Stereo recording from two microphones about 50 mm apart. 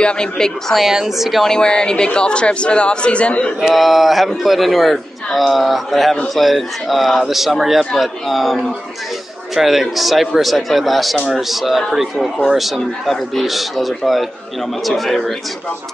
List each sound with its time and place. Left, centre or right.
0.0 s a woman's voice: centre
0.7 s a man's voice: centre
1.4 s speech: centre
3.6 s a man's voice: centre
9.6 s a man's voice: centre